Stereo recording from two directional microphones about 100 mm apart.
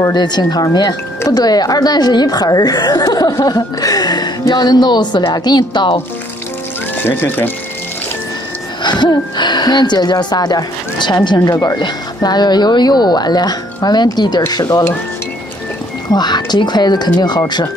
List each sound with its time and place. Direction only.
0.0 s a woman's voice: 45° left (ahead or behind)
7.0 s speech: 20° left (ahead or behind)
8.8 s a woman's voice: 45° left (ahead or behind)
16.1 s a woman's voice: 45° left (ahead or behind)